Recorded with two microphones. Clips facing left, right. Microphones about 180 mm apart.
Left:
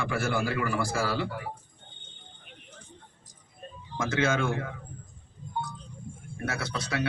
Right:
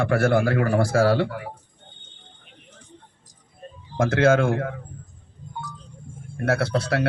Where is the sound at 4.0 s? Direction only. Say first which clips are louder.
Right 9 dB; 60° right (ahead or behind).